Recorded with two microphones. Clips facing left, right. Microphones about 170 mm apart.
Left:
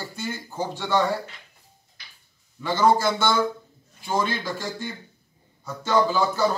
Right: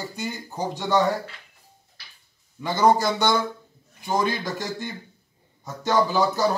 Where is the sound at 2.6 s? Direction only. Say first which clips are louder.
Right 1 dB; 15° right (ahead or behind).